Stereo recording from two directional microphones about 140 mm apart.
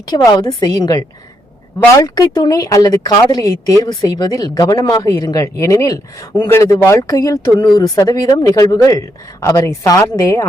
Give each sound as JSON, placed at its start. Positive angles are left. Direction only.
{"t": 0.1, "sound": "speech", "side_deg": 30}